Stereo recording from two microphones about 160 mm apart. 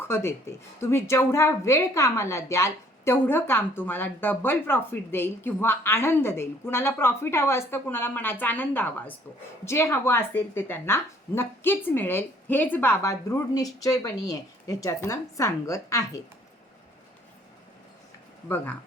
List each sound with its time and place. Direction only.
0.0 s a woman's voice: 15° left (ahead or behind)
18.4 s a woman's voice: 10° left (ahead or behind)